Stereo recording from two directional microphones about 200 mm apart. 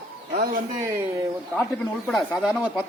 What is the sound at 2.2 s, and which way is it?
Speech, centre (ahead or behind).